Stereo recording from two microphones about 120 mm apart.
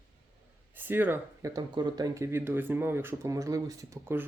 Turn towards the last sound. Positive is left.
turn(degrees=-20)  # may be behind; listen again after turning